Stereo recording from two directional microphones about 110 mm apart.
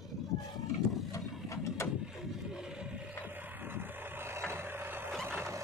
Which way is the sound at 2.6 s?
5° right (ahead or behind).